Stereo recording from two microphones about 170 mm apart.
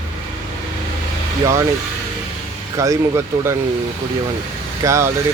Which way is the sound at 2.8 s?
15° right (ahead or behind).